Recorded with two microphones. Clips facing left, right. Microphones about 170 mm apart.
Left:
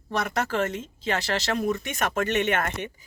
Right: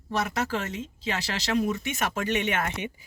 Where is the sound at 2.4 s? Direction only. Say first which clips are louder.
Left 2 dB; 55° left (ahead or behind).